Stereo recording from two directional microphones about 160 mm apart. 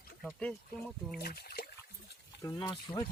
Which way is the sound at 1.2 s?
75° left (ahead or behind).